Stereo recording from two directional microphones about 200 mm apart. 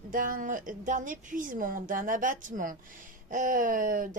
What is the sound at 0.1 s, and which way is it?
A woman's voice, 45° right (ahead or behind).